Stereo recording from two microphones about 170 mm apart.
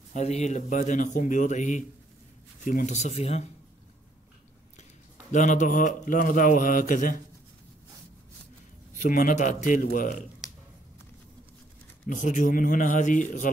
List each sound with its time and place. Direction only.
0.1 s a man's voice: 40° left (ahead or behind)
5.3 s a man's voice: 45° left (ahead or behind)
8.9 s a man's voice: 50° left (ahead or behind)
10.4 s a sound: centre (ahead or behind)
12.1 s a man's voice: 50° left (ahead or behind)